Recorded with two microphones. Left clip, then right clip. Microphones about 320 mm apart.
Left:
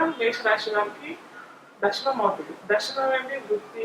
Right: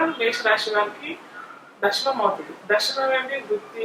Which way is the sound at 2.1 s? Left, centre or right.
Centre.